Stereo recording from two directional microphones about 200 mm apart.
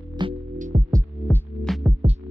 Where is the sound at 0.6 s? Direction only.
35° right (ahead or behind).